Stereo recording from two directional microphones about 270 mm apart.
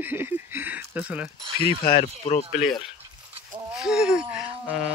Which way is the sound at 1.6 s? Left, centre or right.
Centre.